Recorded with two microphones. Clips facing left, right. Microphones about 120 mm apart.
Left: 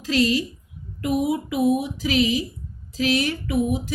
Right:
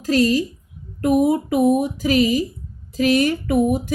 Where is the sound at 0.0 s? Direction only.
45° right (ahead or behind).